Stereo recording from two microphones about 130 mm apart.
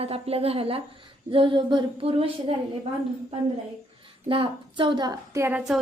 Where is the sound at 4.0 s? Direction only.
45° right (ahead or behind).